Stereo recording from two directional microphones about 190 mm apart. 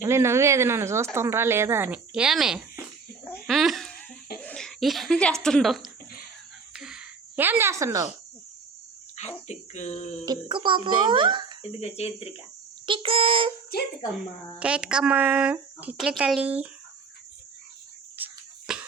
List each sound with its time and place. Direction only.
0.0 s speech: 15° right (ahead or behind)
3.4 s a sound: centre (ahead or behind)
4.4 s speech: 5° left (ahead or behind)
6.7 s a sound: 5° right (ahead or behind)
9.5 s speech: 35° left (ahead or behind)
10.2 s a child's voice: 25° right (ahead or behind)
11.6 s speech: 35° left (ahead or behind)
12.8 s a child's voice: 25° right (ahead or behind)
13.7 s speech: 55° left (ahead or behind)
14.1 s speech: 5° right (ahead or behind)
18.2 s cricket: 10° right (ahead or behind)
18.7 s cough: 5° right (ahead or behind)